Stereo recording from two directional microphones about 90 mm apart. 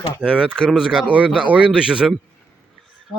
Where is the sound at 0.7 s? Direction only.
5° right (ahead or behind).